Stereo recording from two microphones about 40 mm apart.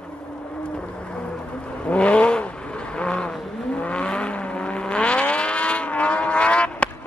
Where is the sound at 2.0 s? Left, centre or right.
Left.